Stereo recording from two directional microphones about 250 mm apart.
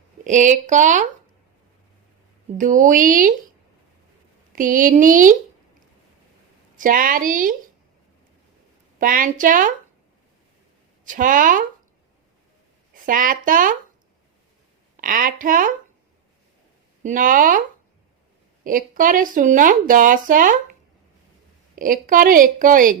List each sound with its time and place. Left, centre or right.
0.3 s speech: right
2.6 s a woman's voice: right
4.5 s a woman's voice: right
6.7 s a woman's voice: right
9.0 s a woman's voice: right
11.0 s a woman's voice: right
12.9 s speech: right
15.0 s a woman's voice: right
17.0 s a woman's voice: right
18.6 s a woman's voice: right
21.8 s a woman's voice: right